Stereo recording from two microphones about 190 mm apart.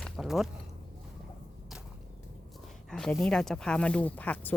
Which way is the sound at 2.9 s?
5° left (ahead or behind).